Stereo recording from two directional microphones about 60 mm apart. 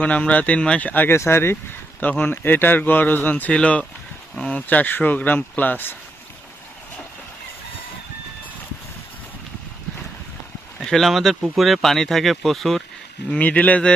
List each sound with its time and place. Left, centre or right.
0.0 s speech: left
1.1 s speech: left
2.0 s speech: left
10.8 s boat: centre
11.1 s speech: centre
13.3 s speech: left